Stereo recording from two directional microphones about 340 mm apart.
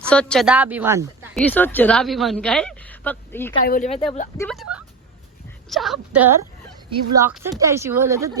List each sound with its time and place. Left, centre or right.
0.0 s speech: centre
3.6 s speech: left
4.4 s speech: centre